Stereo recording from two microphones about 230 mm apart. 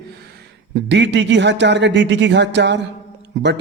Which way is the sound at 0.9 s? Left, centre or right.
Right.